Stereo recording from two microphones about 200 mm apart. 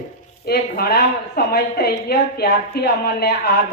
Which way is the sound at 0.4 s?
50° left (ahead or behind).